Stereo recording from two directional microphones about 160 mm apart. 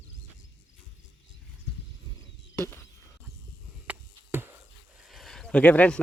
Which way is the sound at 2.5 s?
15° left (ahead or behind).